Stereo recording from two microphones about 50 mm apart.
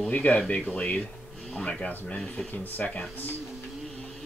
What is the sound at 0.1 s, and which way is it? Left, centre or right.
Speech, left.